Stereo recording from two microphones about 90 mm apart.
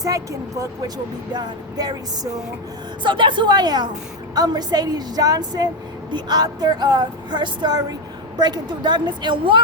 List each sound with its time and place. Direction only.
0.0 s a woman's voice: 40° right (ahead or behind)
1.3 s speech: 50° right (ahead or behind)
3.0 s a woman's voice: 60° right (ahead or behind); by 5.6 s 45° right (ahead or behind)
6.1 s a woman's voice: 55° right (ahead or behind)